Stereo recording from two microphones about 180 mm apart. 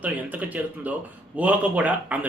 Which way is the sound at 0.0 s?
10° right (ahead or behind).